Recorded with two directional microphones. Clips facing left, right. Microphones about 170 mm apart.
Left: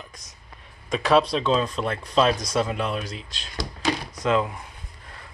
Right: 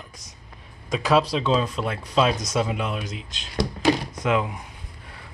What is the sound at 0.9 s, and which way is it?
Speech, 5° right (ahead or behind).